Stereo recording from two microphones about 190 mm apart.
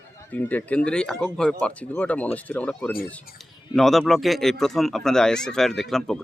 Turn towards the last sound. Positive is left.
turn(degrees=5)  # may be behind; listen again after turning